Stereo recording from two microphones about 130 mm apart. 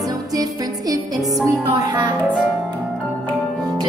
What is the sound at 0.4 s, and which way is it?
Music, 30° right (ahead or behind).